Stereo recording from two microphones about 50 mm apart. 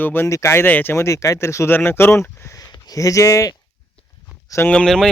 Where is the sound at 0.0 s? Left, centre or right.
Left.